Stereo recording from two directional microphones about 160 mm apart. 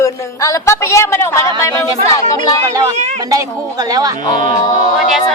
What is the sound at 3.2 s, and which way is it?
Speech, 20° right (ahead or behind).